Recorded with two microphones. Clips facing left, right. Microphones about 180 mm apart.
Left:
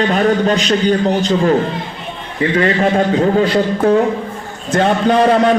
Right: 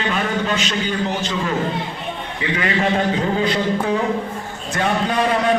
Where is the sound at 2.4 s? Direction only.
40° left (ahead or behind).